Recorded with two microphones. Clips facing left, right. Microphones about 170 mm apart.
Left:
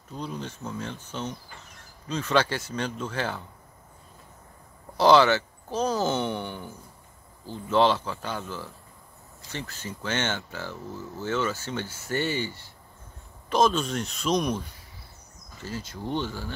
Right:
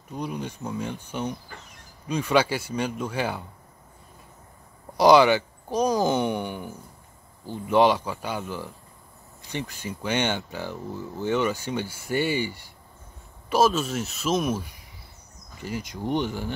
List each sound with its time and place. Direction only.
0.1 s speech: 15° right (ahead or behind)
4.9 s speech: 15° right (ahead or behind)